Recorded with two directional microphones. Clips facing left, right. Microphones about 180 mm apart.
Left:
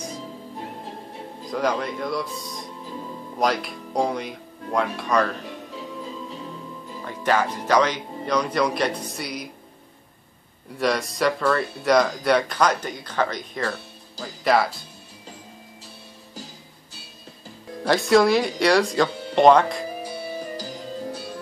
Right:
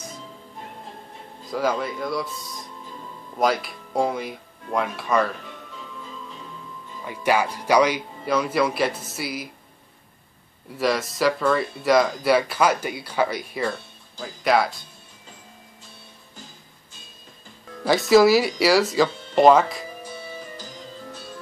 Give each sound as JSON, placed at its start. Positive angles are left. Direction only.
{"t": 1.5, "sound": "speech", "side_deg": -5}
{"t": 7.1, "sound": "speech", "side_deg": -10}
{"t": 10.8, "sound": "speech", "side_deg": 0}
{"t": 17.8, "sound": "speech", "side_deg": 0}
{"t": 20.3, "sound": "music", "side_deg": 35}